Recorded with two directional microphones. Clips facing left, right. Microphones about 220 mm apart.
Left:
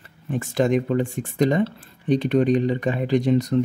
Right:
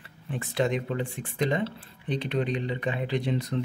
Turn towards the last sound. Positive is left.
turn(degrees=45)  # may be behind; listen again after turning